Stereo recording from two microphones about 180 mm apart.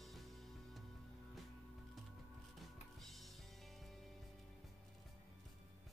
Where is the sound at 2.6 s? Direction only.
Centre (ahead or behind).